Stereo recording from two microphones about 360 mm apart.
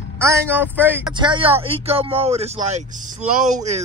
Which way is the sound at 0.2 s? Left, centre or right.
Centre.